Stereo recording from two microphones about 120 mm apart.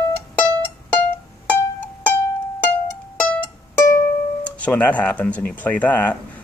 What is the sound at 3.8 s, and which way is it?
Music, 25° left (ahead or behind).